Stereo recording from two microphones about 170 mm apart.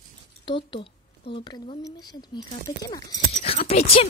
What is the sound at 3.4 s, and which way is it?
Speech, 35° left (ahead or behind).